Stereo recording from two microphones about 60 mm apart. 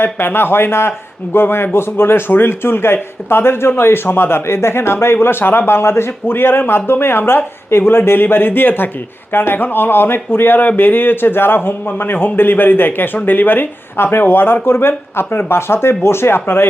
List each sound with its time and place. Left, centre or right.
0.0 s speech: left